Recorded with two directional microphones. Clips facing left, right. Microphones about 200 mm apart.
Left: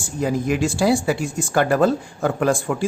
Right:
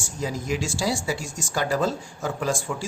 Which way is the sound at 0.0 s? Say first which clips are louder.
Left 8 dB; 55° left (ahead or behind).